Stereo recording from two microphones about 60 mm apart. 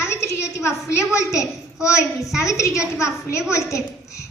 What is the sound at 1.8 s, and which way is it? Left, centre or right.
A woman's voice, left.